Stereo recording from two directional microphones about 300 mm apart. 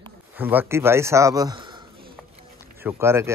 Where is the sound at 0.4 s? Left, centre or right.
Centre.